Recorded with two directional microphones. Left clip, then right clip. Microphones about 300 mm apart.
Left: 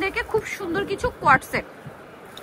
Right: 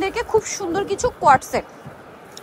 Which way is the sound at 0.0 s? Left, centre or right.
Centre.